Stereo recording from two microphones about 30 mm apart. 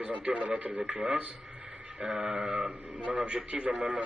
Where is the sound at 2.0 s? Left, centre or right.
Right.